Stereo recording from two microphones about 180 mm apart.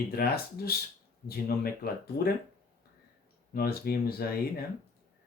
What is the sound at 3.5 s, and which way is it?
Speech, 55° left (ahead or behind).